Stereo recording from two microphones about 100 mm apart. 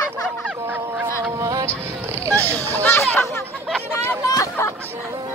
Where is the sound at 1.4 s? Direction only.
35° right (ahead or behind).